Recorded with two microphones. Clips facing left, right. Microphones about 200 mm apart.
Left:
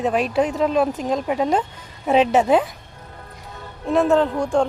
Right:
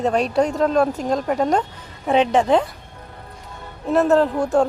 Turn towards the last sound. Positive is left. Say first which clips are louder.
# right 1 dB
turn(degrees=-5)  # may be behind; listen again after turning